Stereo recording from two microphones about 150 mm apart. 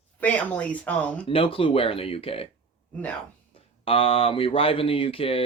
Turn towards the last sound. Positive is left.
turn(degrees=40)  # may be behind; listen again after turning